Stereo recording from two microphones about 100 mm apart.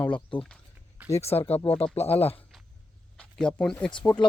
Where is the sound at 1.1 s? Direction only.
90° left.